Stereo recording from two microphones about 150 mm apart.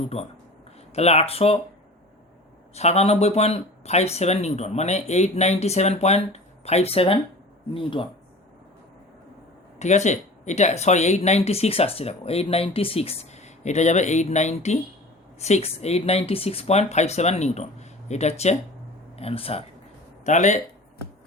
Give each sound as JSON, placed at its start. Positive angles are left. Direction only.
{"t": 0.1, "sound": "speech", "side_deg": 45}
{"t": 2.7, "sound": "speech", "side_deg": 45}
{"t": 9.7, "sound": "speech", "side_deg": 50}
{"t": 20.2, "sound": "speech", "side_deg": 55}